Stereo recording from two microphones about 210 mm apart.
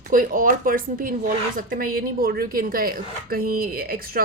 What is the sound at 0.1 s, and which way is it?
A woman's voice, 40° right (ahead or behind).